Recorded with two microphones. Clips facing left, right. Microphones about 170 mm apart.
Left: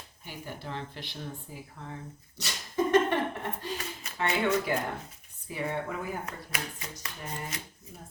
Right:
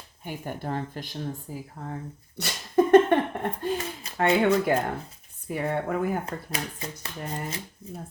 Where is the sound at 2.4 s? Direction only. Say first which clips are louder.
Right 8 dB; 55° right (ahead or behind).